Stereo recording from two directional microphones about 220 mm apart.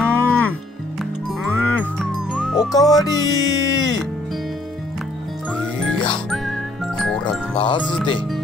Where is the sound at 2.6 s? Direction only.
15° left (ahead or behind).